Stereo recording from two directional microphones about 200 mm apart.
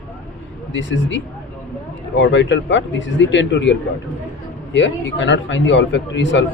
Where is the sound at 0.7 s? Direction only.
65° left (ahead or behind).